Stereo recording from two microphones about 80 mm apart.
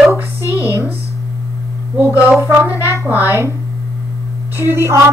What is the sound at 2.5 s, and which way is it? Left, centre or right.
Speech, right.